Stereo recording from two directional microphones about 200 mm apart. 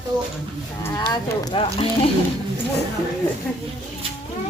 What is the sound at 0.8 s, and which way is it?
Speech, 10° left (ahead or behind).